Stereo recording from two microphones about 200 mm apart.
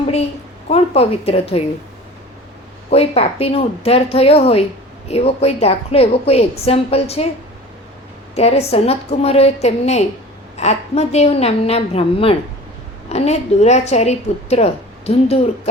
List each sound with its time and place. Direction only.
0.0 s a sound: 30° left (ahead or behind)
0.7 s a woman's voice: 30° left (ahead or behind)
2.9 s a woman's voice: 30° left (ahead or behind)
8.4 s a woman's voice: 30° left (ahead or behind)